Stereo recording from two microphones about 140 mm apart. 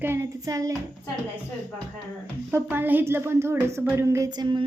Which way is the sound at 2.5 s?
15° right (ahead or behind).